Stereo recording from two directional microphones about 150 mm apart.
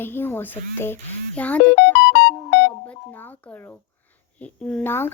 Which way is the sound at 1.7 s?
90° left.